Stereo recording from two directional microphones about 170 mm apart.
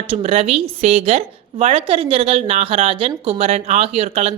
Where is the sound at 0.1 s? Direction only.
35° right (ahead or behind).